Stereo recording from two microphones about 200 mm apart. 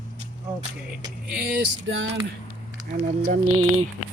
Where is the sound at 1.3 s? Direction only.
55° right (ahead or behind).